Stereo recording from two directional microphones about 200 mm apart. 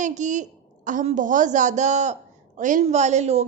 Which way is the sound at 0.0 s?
40° right (ahead or behind).